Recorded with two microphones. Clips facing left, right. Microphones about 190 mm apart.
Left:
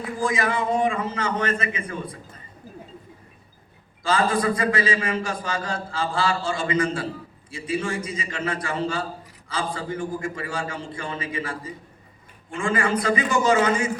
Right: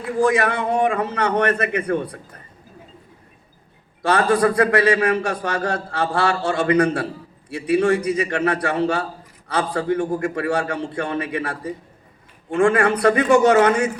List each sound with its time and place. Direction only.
0.2 s a man's voice: 65° right (ahead or behind)
4.0 s a man's voice: 65° right (ahead or behind)